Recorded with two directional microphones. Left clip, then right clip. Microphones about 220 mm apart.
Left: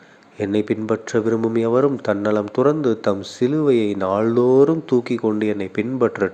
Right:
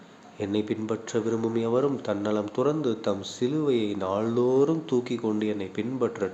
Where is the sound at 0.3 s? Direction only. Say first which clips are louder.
Left 8 dB; 30° left (ahead or behind).